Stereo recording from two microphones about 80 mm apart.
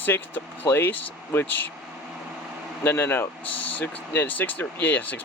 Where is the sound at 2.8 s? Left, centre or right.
Left.